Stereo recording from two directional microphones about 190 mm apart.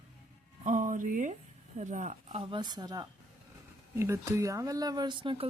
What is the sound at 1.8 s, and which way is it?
Speech, 40° right (ahead or behind).